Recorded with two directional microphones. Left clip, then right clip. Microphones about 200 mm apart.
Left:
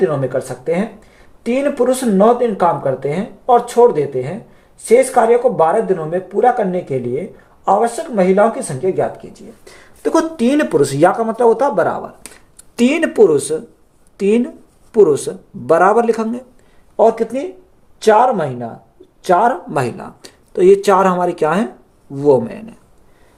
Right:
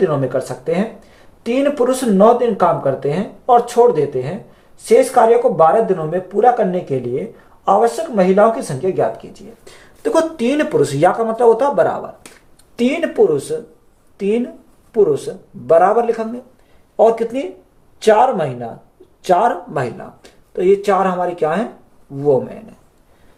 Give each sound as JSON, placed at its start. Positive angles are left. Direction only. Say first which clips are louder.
{"t": 0.0, "sound": "speech", "louder": "even", "side_deg": 15}
{"t": 9.6, "sound": "speech", "louder": "even", "side_deg": 30}
{"t": 12.7, "sound": "speech", "louder": "left 2 dB", "side_deg": 60}
{"t": 17.0, "sound": "a man's voice", "louder": "even", "side_deg": 30}
{"t": 19.7, "sound": "speech", "louder": "left 2 dB", "side_deg": 50}